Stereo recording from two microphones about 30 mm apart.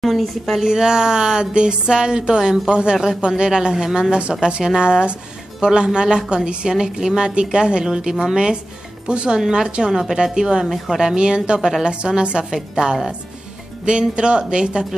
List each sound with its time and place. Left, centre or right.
0.0 s speech: centre
0.6 s speech: right
7.8 s speech: right
9.0 s speech: right
9.8 s a woman's voice: centre
11.1 s speech: right
12.4 s speech: centre
13.8 s speech: right